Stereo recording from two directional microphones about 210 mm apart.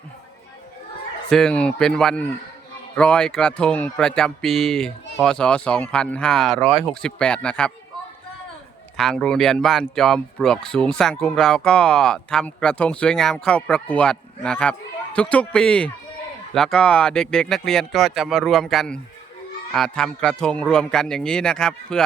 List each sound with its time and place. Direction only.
1.3 s speech: 5° left (ahead or behind)
9.0 s speech: 5° left (ahead or behind)